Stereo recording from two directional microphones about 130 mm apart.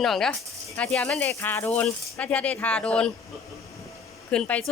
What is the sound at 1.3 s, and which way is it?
Speech, 20° left (ahead or behind).